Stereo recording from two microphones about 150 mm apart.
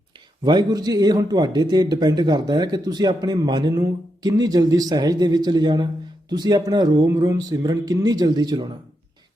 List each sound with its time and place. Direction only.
0.4 s a man's voice: 30° right (ahead or behind)